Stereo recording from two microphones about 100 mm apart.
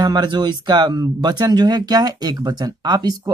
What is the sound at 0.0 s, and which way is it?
Speech, 45° right (ahead or behind).